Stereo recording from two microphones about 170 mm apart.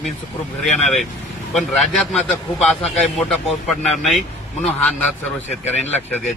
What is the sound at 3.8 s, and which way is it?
Speech, centre (ahead or behind).